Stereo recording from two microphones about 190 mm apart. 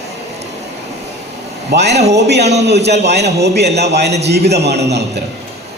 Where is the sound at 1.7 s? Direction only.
60° right (ahead or behind).